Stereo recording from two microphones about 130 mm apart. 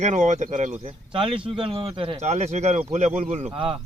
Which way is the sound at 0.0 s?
65° right (ahead or behind).